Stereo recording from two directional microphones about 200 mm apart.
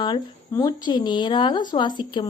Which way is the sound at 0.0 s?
20° left (ahead or behind).